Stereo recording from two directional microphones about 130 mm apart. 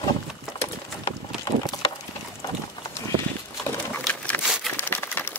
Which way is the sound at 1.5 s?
25° left (ahead or behind).